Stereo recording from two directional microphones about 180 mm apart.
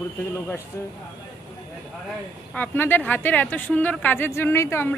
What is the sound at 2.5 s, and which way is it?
A woman's voice, 10° left (ahead or behind).